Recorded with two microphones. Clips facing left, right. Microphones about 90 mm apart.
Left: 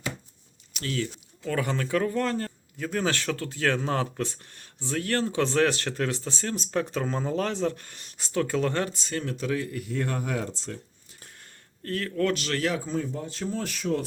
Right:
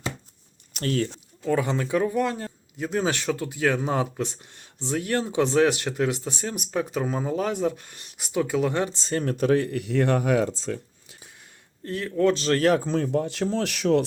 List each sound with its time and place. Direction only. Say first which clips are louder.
0.7 s speech: right 5 dB; 45° right (ahead or behind)
1.5 s a man's voice: right 4 dB; 15° right (ahead or behind)
8.9 s speech: right 5 dB; 30° right (ahead or behind)
9.2 s speech: right 9 dB; 50° right (ahead or behind); by 10.5 s 90° right
11.8 s a man's voice: right 4 dB; 20° right (ahead or behind); by 12.6 s 35° right (ahead or behind)
12.6 s a man's voice: right 8 dB; 50° right (ahead or behind)
12.9 s speech: right 6 dB; 75° right (ahead or behind)